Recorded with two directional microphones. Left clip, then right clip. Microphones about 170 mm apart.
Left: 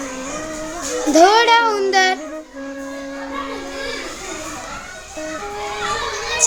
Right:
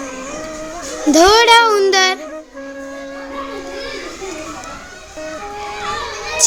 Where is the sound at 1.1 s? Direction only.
50° right (ahead or behind).